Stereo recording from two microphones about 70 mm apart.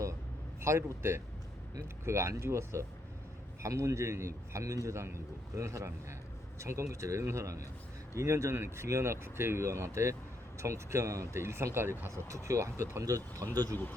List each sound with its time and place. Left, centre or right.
0.6 s a man's voice: right